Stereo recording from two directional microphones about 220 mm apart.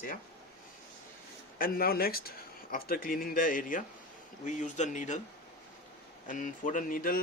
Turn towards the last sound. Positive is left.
turn(degrees=40)  # may be behind; listen again after turning